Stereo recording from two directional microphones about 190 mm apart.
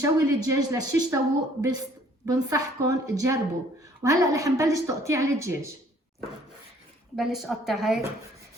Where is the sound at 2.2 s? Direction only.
15° right (ahead or behind).